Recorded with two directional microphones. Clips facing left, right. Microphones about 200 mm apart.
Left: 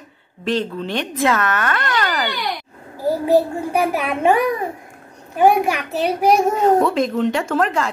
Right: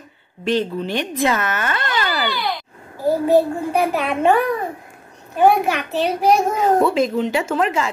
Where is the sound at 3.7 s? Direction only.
10° left (ahead or behind).